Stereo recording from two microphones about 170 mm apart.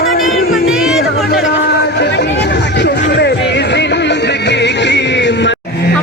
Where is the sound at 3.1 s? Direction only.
85° left.